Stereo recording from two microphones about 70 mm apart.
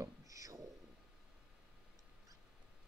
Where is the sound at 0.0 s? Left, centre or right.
Right.